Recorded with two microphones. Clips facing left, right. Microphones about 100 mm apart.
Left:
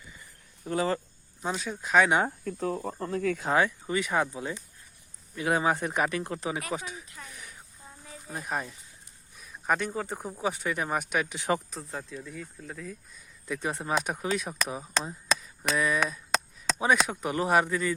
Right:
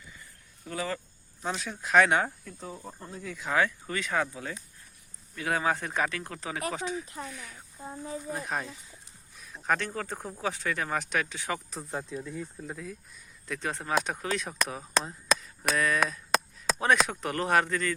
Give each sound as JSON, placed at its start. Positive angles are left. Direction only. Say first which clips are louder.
{"t": 0.6, "sound": "speech", "louder": "left 6 dB", "side_deg": 30}
{"t": 1.4, "sound": "speech", "louder": "left 2 dB", "side_deg": 5}
{"t": 2.4, "sound": "speech", "louder": "left 10 dB", "side_deg": 55}
{"t": 3.5, "sound": "speech", "louder": "even", "side_deg": 20}
{"t": 7.2, "sound": "speech", "louder": "right 7 dB", "side_deg": -35}
{"t": 7.8, "sound": "snake", "louder": "right 13 dB", "side_deg": -40}
{"t": 8.3, "sound": "speech", "louder": "left 2 dB", "side_deg": 5}
{"t": 11.9, "sound": "speech", "louder": "right 4 dB", "side_deg": -15}
{"t": 13.5, "sound": "speech", "louder": "even", "side_deg": 15}
{"t": 16.0, "sound": "a sound", "louder": "right 1 dB", "side_deg": 5}
{"t": 16.8, "sound": "speech", "louder": "even", "side_deg": 5}